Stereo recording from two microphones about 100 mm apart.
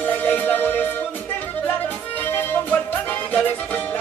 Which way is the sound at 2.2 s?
20° left (ahead or behind).